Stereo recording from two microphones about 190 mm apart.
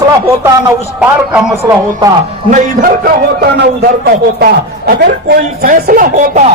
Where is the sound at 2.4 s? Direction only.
45° right (ahead or behind).